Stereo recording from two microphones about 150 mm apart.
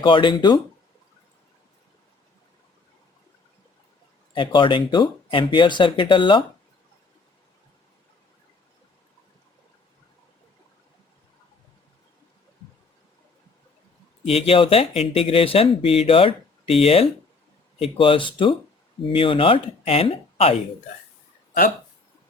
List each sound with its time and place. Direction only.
0.0 s speech: 35° left (ahead or behind)
4.4 s speech: 35° left (ahead or behind)
14.3 s speech: 40° left (ahead or behind)